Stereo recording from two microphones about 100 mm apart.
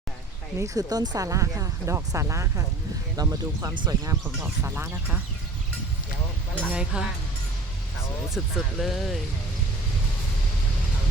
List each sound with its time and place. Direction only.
0.6 s speech: 35° right (ahead or behind)
4.7 s speech: 15° right (ahead or behind)
6.7 s speech: 5° right (ahead or behind)
8.3 s speech: centre (ahead or behind)